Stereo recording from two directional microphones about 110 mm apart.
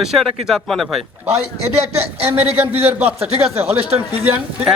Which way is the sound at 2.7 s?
65° right (ahead or behind).